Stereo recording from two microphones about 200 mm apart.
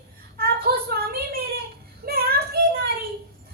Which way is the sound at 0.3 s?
50° right (ahead or behind).